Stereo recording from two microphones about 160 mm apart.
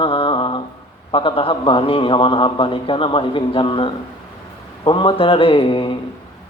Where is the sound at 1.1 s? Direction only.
35° left (ahead or behind).